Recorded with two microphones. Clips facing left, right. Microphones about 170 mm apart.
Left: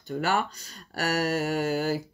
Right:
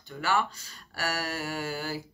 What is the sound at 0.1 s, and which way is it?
Speech, 40° left (ahead or behind).